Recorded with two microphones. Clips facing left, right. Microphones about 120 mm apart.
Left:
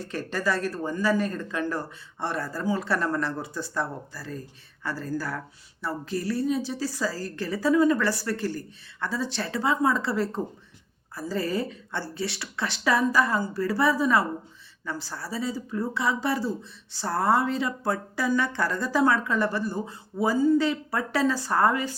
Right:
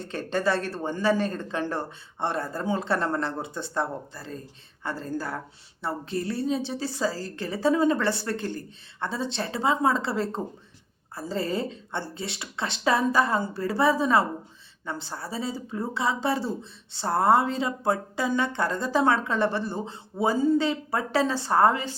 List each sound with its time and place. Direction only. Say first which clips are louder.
0.0 s speech: right 2 dB; 25° right (ahead or behind)